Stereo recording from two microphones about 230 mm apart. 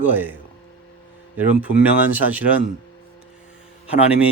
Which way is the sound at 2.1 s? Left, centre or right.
Centre.